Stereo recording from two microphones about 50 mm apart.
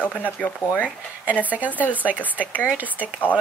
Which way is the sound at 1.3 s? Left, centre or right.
Right.